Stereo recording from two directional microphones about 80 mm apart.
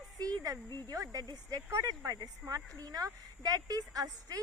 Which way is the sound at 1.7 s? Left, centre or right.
Right.